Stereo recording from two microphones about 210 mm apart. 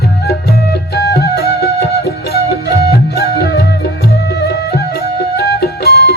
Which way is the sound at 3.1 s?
50° left (ahead or behind).